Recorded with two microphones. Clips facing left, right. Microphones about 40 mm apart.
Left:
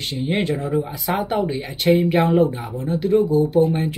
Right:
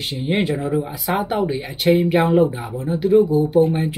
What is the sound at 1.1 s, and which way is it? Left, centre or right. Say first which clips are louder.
Speech: right 1 dB; centre.